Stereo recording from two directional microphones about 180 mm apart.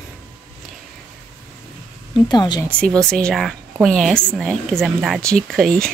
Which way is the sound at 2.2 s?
25° left (ahead or behind).